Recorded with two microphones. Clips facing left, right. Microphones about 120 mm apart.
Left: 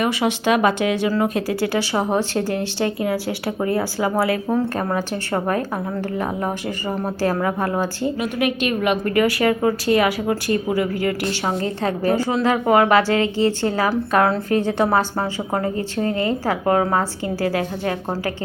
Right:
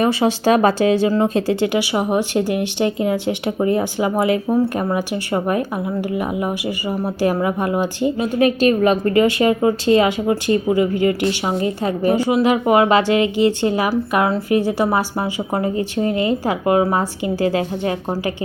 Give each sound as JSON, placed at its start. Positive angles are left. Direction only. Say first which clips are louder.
{"t": 0.0, "sound": "a woman's voice", "louder": "right 4 dB", "side_deg": -30}
{"t": 8.2, "sound": "a woman's voice", "louder": "right 7 dB", "side_deg": -35}